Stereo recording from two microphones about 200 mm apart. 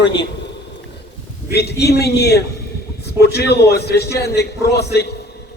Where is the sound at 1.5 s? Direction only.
55° left (ahead or behind).